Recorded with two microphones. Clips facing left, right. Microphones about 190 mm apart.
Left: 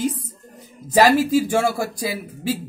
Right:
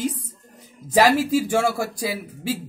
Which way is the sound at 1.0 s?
Centre (ahead or behind).